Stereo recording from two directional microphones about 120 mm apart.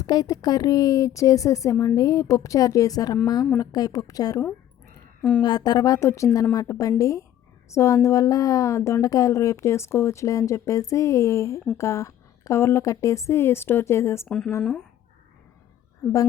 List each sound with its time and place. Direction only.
0.0 s a woman's voice: 30° left (ahead or behind)
5.4 s a woman's voice: 35° left (ahead or behind)
14.3 s speech: 5° left (ahead or behind)